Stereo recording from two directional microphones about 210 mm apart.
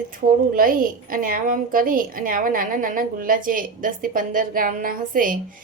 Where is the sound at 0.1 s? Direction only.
40° right (ahead or behind).